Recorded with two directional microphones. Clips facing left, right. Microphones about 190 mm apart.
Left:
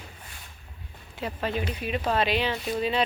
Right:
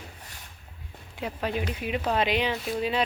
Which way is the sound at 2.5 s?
Centre (ahead or behind).